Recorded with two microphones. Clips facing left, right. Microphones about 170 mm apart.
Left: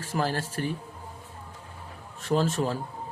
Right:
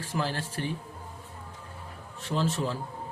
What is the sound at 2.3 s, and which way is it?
Speech, 50° left (ahead or behind).